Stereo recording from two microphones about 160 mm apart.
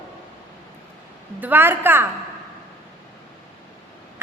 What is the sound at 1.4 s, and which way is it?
Speech, 10° right (ahead or behind).